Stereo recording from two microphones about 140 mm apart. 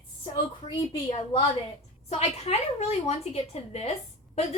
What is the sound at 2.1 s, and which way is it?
A woman's voice, 50° left (ahead or behind).